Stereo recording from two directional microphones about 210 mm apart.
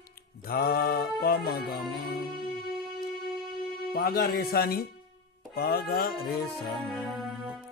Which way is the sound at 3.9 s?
45° left (ahead or behind).